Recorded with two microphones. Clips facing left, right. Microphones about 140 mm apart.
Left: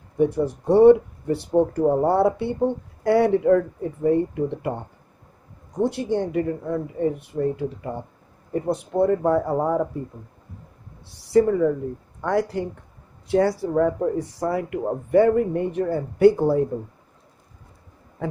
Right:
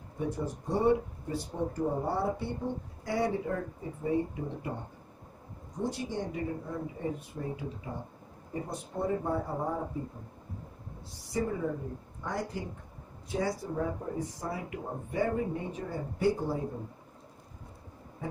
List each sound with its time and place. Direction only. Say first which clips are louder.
0.2 s speech: left 13 dB; 70° left (ahead or behind); by 9.8 s 85° left
11.3 s speech: left 14 dB; 70° left (ahead or behind)
18.2 s a sound: left 9 dB; 90° left